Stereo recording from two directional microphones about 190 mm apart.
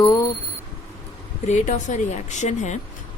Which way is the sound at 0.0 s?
15° left (ahead or behind).